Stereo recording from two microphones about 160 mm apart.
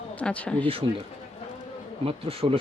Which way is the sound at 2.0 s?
35° right (ahead or behind).